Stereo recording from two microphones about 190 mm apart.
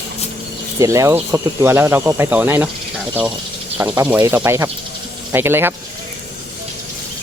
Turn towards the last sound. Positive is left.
turn(degrees=-10)  # may be behind; listen again after turning